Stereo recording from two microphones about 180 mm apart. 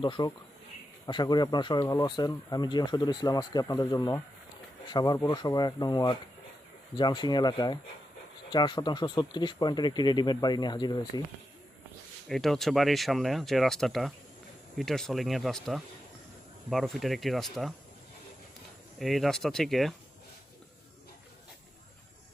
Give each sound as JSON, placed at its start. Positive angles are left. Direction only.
{"t": 0.0, "sound": "speech", "side_deg": 25}
{"t": 12.3, "sound": "speech", "side_deg": 0}
{"t": 18.9, "sound": "speech", "side_deg": 0}